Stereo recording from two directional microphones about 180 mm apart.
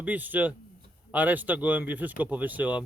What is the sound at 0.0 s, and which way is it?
Speech, 10° right (ahead or behind).